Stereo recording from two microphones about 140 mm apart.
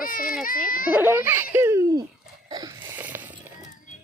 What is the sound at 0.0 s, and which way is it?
Baby cry, 90° left.